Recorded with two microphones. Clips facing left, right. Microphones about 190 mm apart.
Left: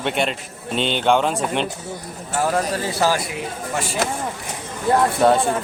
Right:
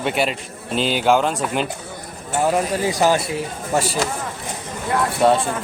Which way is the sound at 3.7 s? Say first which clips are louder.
Right 7 dB; 35° right (ahead or behind).